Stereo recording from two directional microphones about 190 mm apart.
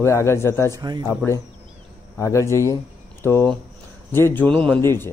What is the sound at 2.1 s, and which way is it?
Speech, 15° left (ahead or behind).